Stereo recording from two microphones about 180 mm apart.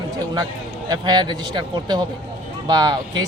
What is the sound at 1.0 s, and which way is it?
Speech, 25° right (ahead or behind).